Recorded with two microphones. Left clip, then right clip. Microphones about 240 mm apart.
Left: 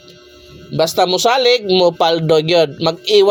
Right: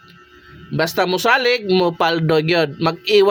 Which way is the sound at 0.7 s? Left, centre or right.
Right.